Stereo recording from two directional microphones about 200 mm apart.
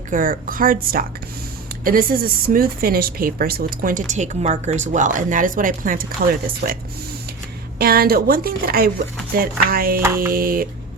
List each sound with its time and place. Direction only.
0.1 s speech: 45° right (ahead or behind)